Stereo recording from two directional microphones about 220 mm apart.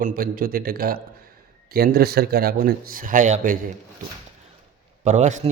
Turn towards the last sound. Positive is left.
turn(degrees=-35)  # may be behind; listen again after turning